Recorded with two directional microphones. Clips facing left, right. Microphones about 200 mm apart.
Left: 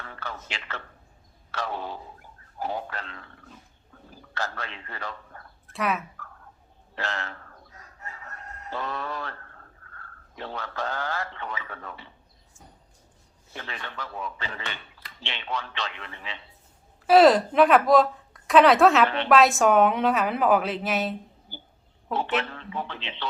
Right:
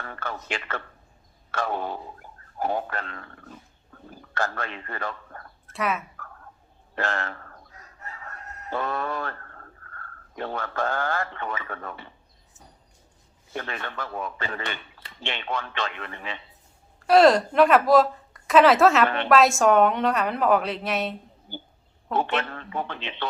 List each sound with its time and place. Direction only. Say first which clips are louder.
0.0 s a man's voice: right 4 dB; 50° right (ahead or behind)
5.7 s speech: even; centre (ahead or behind)
6.9 s speech: right 4 dB; 50° right (ahead or behind)
8.7 s a man's voice: right 4 dB; 50° right (ahead or behind)
13.5 s speech: right 5 dB; 50° right (ahead or behind)
17.1 s a woman's voice: even; centre (ahead or behind)
19.0 s speech: right 1 dB; 50° right (ahead or behind)
19.3 s a woman's voice: right 1 dB; centre (ahead or behind)
21.5 s speech: right 11 dB; 55° right (ahead or behind)